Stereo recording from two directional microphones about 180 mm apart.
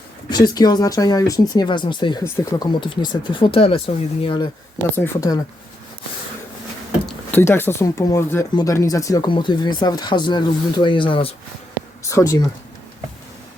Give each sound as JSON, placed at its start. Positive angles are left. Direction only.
{"t": 0.3, "sound": "speech", "side_deg": 20}
{"t": 4.9, "sound": "speech", "side_deg": 15}
{"t": 7.3, "sound": "speech", "side_deg": 10}
{"t": 12.0, "sound": "speech", "side_deg": 20}